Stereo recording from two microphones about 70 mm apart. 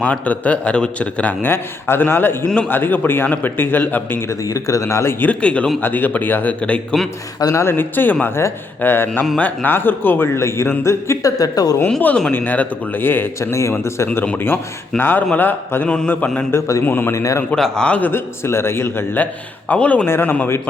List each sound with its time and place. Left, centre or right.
0.0 s a man's voice: left
4.3 s speech: left
5.2 s speech: centre
5.8 s a man's voice: left
7.5 s a man's voice: left
11.9 s a man's voice: left
14.3 s a man's voice: left
16.5 s speech: left
16.8 s a man's voice: left
17.2 s speech: left
17.5 s speech: centre
18.1 s a man's voice: left; by 20.1 s centre
20.1 s a man's voice: left